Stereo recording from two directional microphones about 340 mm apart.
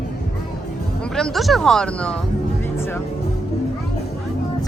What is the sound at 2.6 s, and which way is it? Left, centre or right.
Music, centre.